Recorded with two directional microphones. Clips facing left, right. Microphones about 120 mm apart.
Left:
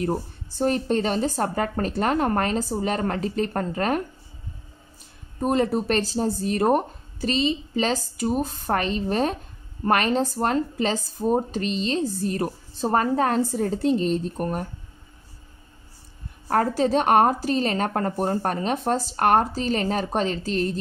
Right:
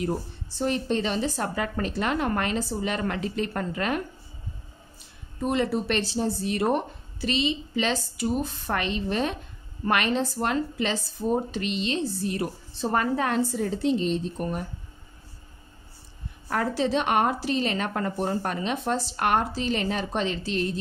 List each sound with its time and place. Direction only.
0.6 s a woman's voice: 45° left (ahead or behind)
5.4 s a woman's voice: 40° left (ahead or behind)
16.4 s a woman's voice: 45° left (ahead or behind)